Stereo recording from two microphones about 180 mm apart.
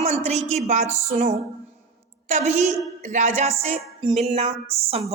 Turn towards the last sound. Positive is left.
turn(degrees=-30)  # may be behind; listen again after turning